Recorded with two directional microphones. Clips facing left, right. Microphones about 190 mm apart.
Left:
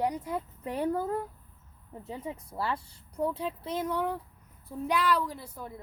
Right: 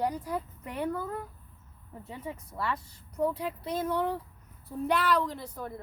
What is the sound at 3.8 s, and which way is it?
A woman's voice, 15° left (ahead or behind).